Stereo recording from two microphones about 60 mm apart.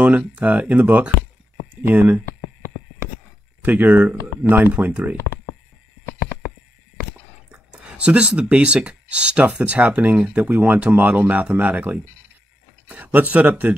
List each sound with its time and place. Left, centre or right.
0.0 s speech: right
3.6 s speech: right
7.7 s speech: centre